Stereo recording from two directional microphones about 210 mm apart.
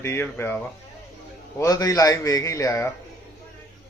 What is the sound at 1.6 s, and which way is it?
Speech, 15° left (ahead or behind).